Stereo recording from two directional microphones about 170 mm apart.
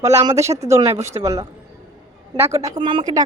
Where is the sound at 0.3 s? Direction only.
15° right (ahead or behind).